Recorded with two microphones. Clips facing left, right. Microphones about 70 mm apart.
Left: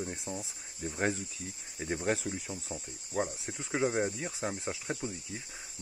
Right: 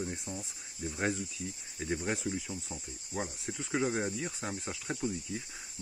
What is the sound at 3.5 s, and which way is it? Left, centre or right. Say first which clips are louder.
Speech: left 2 dB; left.